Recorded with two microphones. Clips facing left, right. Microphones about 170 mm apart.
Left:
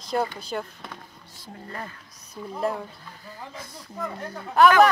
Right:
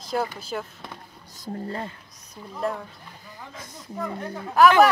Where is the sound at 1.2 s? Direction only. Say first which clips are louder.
Right 9 dB; 40° right (ahead or behind).